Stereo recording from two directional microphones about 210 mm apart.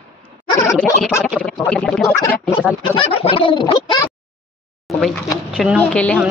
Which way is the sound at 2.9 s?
25° left (ahead or behind).